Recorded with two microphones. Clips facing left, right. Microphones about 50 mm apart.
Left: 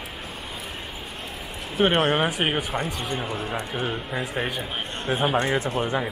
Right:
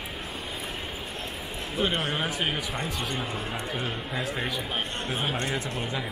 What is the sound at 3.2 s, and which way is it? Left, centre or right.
Speech, left.